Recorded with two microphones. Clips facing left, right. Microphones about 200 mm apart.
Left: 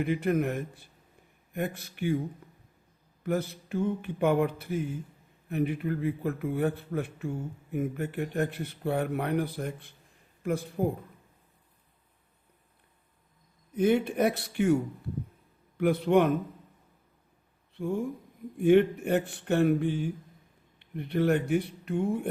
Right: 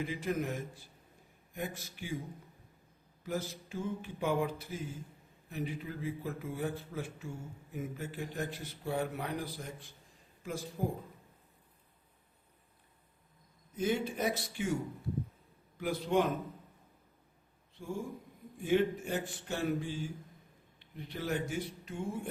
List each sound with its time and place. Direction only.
0.0 s a man's voice: 60° left (ahead or behind)
3.2 s a man's voice: 60° left (ahead or behind)
13.7 s a man's voice: 60° left (ahead or behind)
15.8 s a man's voice: 60° left (ahead or behind)
17.7 s a man's voice: 60° left (ahead or behind)